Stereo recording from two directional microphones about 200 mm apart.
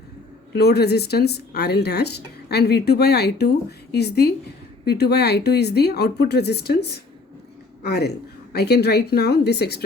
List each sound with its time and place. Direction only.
0.5 s a woman's voice: 55° left (ahead or behind)